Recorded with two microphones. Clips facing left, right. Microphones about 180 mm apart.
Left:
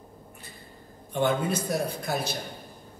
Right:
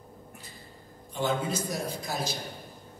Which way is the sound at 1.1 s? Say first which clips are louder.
Left 4 dB; 60° left (ahead or behind).